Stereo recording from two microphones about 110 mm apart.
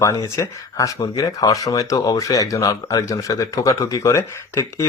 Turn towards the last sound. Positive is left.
turn(degrees=25)  # may be behind; listen again after turning